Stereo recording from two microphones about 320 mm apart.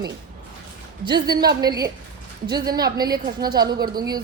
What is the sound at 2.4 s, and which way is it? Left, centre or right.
Speech, centre.